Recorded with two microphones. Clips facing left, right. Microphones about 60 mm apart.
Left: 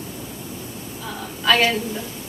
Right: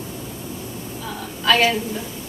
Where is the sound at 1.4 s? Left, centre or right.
Centre.